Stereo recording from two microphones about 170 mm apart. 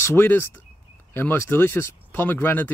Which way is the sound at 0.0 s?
15° left (ahead or behind).